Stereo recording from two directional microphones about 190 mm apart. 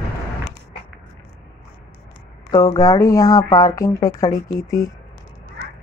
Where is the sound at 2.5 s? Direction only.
20° left (ahead or behind).